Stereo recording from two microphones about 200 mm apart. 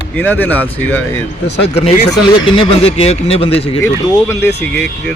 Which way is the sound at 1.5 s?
30° left (ahead or behind).